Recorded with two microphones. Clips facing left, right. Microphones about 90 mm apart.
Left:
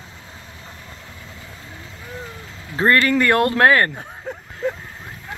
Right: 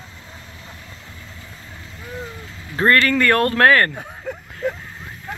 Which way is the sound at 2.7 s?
15° left (ahead or behind).